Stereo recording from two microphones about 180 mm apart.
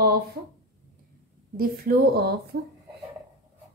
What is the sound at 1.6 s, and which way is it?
Speech, 60° right (ahead or behind).